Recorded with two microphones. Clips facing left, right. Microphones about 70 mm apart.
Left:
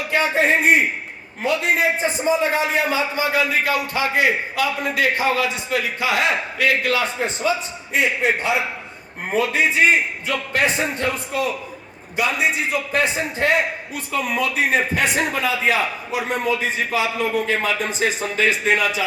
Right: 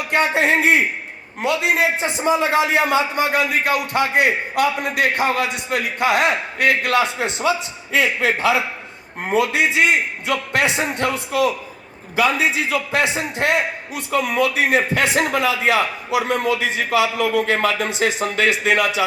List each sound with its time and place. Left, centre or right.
0.1 s a man's voice: right
1.4 s a man's voice: right
9.3 s a man's voice: right
12.7 s a man's voice: right
17.4 s a man's voice: right